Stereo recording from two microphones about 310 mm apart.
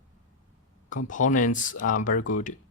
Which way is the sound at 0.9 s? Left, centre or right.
Left.